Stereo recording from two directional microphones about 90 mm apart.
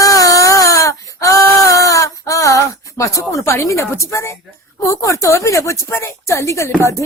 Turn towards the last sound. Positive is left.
turn(degrees=35)  # may be behind; listen again after turning